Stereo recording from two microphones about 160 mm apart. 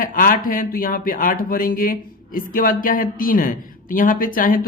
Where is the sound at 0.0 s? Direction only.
60° left (ahead or behind).